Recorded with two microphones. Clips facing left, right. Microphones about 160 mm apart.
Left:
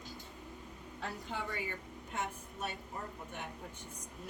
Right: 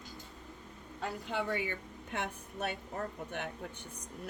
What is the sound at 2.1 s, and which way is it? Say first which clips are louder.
Speech: right 2 dB; 65° right (ahead or behind).